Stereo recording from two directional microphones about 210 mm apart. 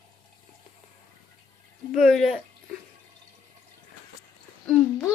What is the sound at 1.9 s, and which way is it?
Speech, centre (ahead or behind).